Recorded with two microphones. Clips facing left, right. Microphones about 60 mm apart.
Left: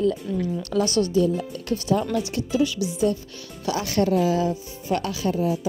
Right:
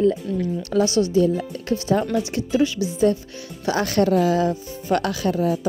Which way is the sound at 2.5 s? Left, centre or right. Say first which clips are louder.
Right 3 dB; right.